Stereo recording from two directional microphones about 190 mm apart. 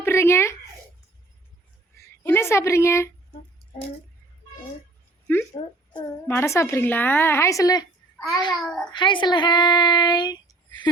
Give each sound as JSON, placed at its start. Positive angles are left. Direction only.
{"t": 0.0, "sound": "speech", "side_deg": 15}
{"t": 2.2, "sound": "a woman's voice", "side_deg": 10}
{"t": 5.6, "sound": "babbling", "side_deg": 25}
{"t": 5.9, "sound": "a woman's voice", "side_deg": 10}
{"t": 8.3, "sound": "babbling", "side_deg": 25}
{"t": 8.6, "sound": "a child's voice", "side_deg": 0}
{"t": 8.9, "sound": "speech", "side_deg": 25}